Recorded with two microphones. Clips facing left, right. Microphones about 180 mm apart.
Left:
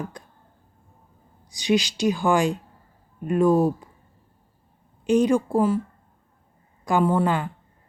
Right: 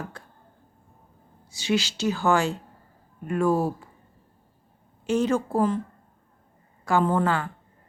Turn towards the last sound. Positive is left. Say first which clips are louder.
# left 2 dB
turn(degrees=15)  # may be behind; listen again after turning